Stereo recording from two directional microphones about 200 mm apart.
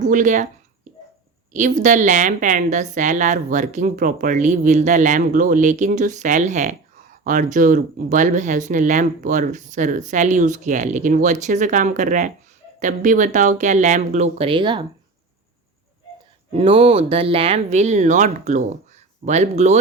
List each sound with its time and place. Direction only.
0.0 s speech: 40° right (ahead or behind)
1.5 s a woman's voice: 40° right (ahead or behind)
16.5 s a woman's voice: 30° right (ahead or behind)